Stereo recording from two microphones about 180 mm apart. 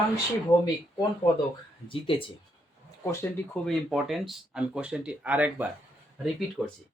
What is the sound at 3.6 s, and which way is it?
Speech, centre (ahead or behind).